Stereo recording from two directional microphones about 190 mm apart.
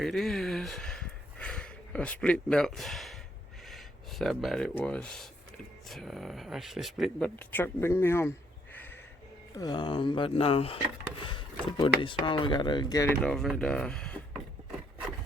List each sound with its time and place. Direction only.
0.0 s a sound: centre (ahead or behind)
3.7 s speech: centre (ahead or behind)
9.6 s speech: 25° left (ahead or behind)
11.2 s a sound: 25° left (ahead or behind)
11.9 s speech: 25° left (ahead or behind)
13.2 s speech: centre (ahead or behind)